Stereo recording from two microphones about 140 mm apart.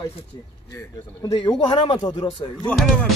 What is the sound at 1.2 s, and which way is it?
A man's voice, 30° left (ahead or behind).